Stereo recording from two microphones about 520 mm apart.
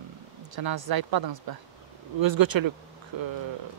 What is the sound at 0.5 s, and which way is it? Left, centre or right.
Speech, right.